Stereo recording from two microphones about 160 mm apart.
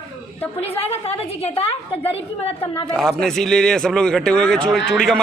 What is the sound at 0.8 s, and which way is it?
Speech, 40° left (ahead or behind).